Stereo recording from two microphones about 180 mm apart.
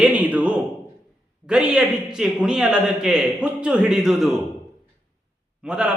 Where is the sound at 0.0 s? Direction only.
10° right (ahead or behind).